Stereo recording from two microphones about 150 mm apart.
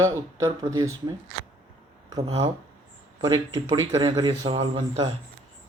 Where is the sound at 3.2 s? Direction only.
25° right (ahead or behind).